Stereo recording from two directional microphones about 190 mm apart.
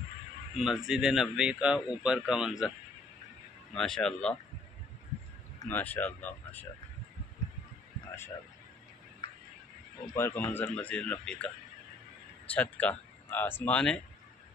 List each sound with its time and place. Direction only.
0.6 s speech: centre (ahead or behind)
3.7 s speech: 5° left (ahead or behind)
5.6 s speech: 10° left (ahead or behind)
9.2 s a sound: 25° left (ahead or behind)
10.1 s speech: 10° left (ahead or behind)
12.5 s speech: 10° left (ahead or behind)